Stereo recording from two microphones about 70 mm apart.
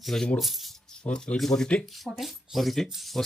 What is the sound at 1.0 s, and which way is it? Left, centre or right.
Speech, centre.